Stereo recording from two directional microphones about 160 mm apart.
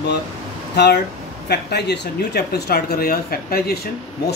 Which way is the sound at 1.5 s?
85° left.